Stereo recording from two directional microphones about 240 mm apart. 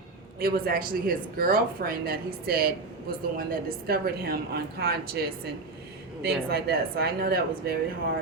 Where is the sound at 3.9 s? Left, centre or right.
Right.